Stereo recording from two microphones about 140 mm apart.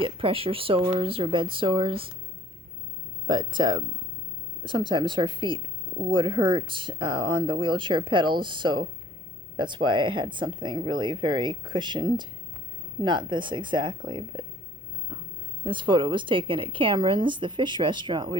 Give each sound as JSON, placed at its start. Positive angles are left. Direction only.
{"t": 0.0, "sound": "speech", "side_deg": -40}
{"t": 3.2, "sound": "speech", "side_deg": -35}
{"t": 15.6, "sound": "speech", "side_deg": -35}